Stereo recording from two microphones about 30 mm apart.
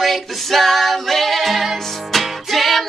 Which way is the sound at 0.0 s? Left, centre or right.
Centre.